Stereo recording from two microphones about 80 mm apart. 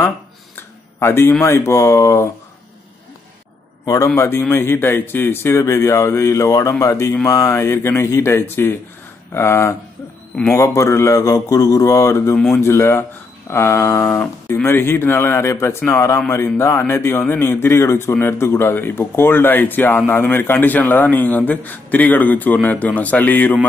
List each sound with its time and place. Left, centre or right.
0.6 s a sound: left
1.4 s speech: left
3.8 s a man's voice: left
4.2 s a man's voice: left